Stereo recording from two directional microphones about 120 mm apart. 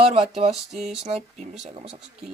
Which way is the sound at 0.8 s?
55° right (ahead or behind).